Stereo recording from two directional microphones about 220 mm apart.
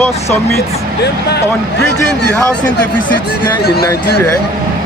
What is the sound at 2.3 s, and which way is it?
Speech, 5° left (ahead or behind).